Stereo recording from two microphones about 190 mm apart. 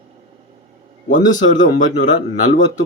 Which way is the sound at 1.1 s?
40° left (ahead or behind).